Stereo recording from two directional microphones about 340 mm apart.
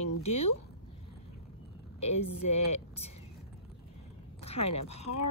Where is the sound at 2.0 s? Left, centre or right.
Centre.